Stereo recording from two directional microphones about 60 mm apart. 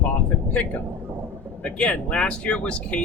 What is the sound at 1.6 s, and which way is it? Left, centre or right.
Speech, centre.